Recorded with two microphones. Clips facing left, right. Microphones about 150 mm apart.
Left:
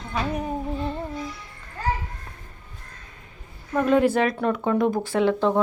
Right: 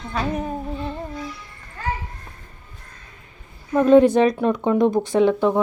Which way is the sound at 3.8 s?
20° right (ahead or behind).